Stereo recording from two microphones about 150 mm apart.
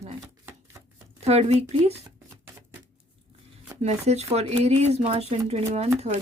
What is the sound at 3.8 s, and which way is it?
Speech, 45° right (ahead or behind).